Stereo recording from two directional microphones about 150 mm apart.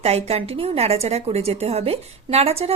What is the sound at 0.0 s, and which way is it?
A woman's voice, 45° right (ahead or behind).